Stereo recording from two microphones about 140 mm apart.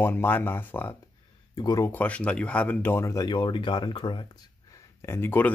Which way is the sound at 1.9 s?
10° left (ahead or behind).